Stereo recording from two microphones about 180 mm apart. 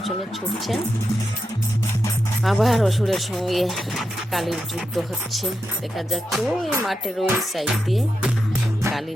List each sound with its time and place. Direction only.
2.4 s speech: centre (ahead or behind)